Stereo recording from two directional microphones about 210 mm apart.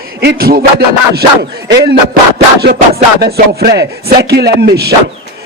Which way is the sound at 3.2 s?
50° right (ahead or behind).